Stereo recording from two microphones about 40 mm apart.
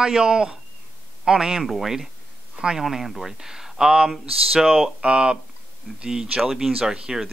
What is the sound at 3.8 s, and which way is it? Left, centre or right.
Speech, right.